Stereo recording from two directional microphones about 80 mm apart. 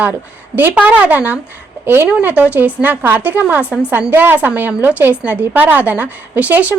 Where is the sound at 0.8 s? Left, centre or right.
Centre.